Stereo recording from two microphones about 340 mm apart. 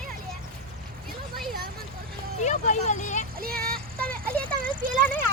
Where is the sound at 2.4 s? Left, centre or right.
Centre.